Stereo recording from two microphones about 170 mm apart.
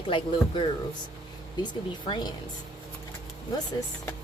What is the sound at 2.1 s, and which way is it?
Speech, 25° left (ahead or behind).